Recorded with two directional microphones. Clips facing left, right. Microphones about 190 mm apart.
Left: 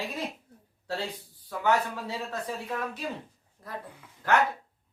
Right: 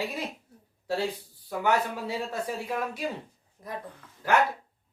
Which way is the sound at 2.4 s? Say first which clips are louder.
Right 2 dB; 10° right (ahead or behind).